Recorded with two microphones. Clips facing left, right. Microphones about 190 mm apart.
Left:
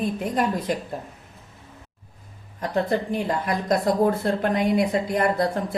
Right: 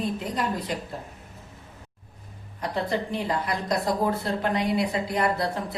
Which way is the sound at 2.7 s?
50° left (ahead or behind).